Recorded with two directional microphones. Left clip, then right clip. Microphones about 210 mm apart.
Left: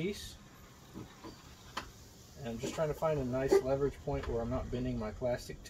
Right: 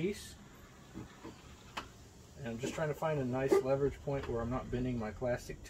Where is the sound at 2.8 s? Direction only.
25° right (ahead or behind).